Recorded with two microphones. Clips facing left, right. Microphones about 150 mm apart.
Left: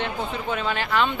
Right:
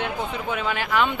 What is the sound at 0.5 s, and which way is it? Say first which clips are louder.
Speech: even; 10° right (ahead or behind).